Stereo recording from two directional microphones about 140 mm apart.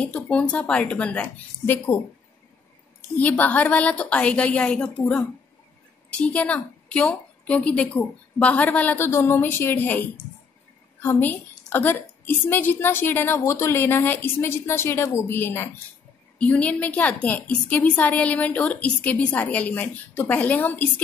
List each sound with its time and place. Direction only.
0.0 s a woman's voice: 10° left (ahead or behind)
3.0 s a woman's voice: 15° left (ahead or behind)